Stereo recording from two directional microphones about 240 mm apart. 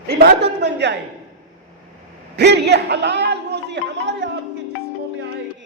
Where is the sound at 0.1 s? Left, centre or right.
Right.